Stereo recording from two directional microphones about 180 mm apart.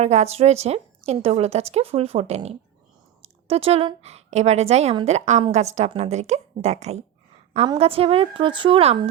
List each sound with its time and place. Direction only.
0.0 s a woman's voice: 40° right (ahead or behind)